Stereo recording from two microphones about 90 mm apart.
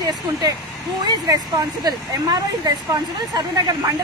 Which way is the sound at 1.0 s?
50° right (ahead or behind).